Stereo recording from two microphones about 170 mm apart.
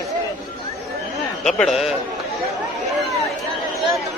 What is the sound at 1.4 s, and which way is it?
Speech, centre (ahead or behind).